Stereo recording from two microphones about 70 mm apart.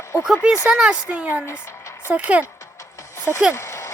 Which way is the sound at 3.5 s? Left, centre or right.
Left.